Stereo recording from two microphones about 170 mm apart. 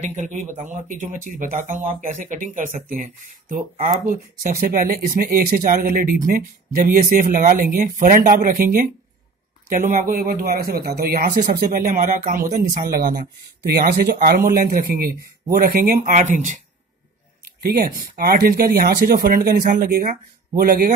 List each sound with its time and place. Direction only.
0.0 s speech: 45° right (ahead or behind)
13.7 s speech: 65° right (ahead or behind)
16.1 s speech: 45° right (ahead or behind)
17.6 s speech: 65° right (ahead or behind)